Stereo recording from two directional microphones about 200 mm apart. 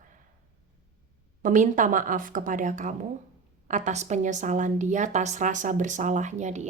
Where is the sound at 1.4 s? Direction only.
40° right (ahead or behind).